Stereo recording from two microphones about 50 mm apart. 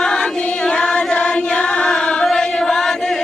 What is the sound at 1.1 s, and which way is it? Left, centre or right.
Music, left.